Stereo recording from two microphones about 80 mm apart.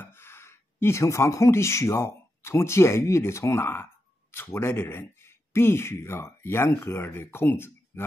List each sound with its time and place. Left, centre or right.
0.0 s speech: left